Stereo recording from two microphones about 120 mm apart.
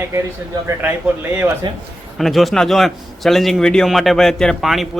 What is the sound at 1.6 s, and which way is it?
Speech, 40° right (ahead or behind).